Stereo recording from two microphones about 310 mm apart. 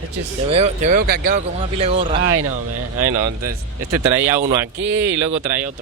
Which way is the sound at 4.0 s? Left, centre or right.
Centre.